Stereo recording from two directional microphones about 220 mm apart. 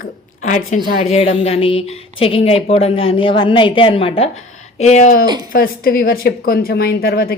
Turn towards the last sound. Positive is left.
turn(degrees=45)  # may be behind; listen again after turning